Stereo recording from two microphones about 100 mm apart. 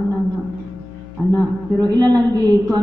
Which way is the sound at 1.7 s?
40° right (ahead or behind).